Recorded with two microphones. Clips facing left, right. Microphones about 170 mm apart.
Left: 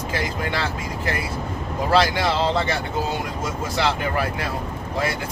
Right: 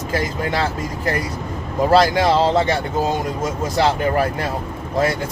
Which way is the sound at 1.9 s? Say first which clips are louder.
Right 5 dB; 40° right (ahead or behind).